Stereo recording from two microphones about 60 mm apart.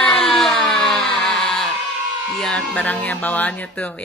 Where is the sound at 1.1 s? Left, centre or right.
Centre.